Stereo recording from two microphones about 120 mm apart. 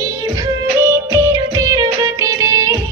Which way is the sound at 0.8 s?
25° right (ahead or behind).